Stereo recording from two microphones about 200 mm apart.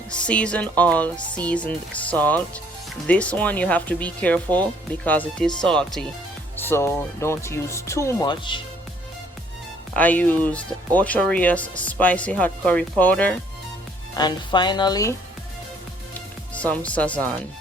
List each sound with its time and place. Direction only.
0.1 s speech: 5° left (ahead or behind); by 8.6 s 25° left (ahead or behind)
9.9 s speech: 10° left (ahead or behind)
14.2 s speech: 20° left (ahead or behind)
16.6 s speech: 5° left (ahead or behind)